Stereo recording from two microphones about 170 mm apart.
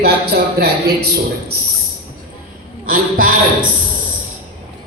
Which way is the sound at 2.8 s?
55° right (ahead or behind).